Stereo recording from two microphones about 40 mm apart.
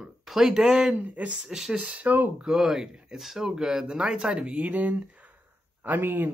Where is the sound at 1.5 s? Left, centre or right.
Centre.